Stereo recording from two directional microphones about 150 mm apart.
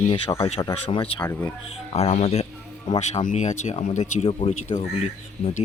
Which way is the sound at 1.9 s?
45° left (ahead or behind).